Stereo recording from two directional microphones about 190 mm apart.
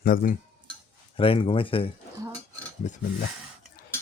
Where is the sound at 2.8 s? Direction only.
45° left (ahead or behind).